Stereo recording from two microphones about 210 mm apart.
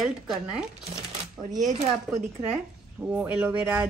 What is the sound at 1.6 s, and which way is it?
Speech, 35° right (ahead or behind).